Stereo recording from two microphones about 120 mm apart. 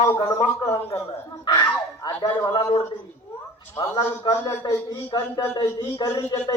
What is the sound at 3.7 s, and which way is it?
A man's voice, 25° left (ahead or behind).